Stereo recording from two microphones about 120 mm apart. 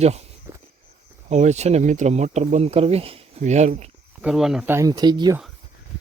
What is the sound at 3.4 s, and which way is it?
Speech, 75° right (ahead or behind).